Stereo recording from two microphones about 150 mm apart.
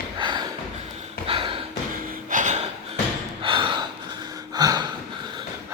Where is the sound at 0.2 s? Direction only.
30° right (ahead or behind).